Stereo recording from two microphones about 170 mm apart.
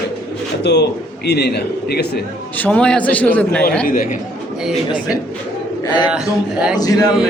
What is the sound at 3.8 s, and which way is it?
Speech, 55° left (ahead or behind).